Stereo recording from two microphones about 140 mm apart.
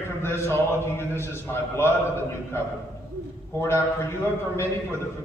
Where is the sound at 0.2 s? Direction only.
15° left (ahead or behind).